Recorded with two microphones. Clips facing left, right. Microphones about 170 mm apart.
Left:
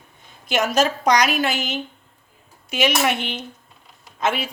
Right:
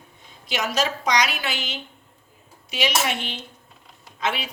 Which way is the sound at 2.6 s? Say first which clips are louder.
Left 4 dB; 55° left (ahead or behind).